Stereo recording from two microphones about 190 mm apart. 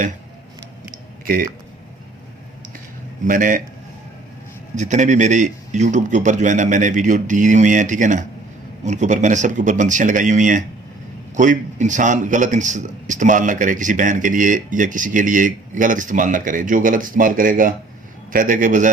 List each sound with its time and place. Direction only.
3.2 s a man's voice: 45° right (ahead or behind)
4.7 s a man's voice: 40° right (ahead or behind)